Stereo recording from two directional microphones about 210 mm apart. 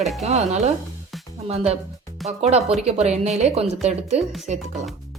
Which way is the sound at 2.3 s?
30° right (ahead or behind).